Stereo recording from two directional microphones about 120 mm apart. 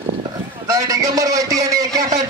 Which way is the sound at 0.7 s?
30° right (ahead or behind).